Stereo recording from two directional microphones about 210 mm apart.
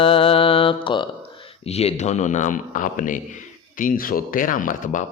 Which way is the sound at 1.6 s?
30° left (ahead or behind).